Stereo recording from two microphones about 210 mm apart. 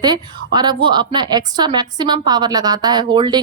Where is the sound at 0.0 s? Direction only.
20° right (ahead or behind).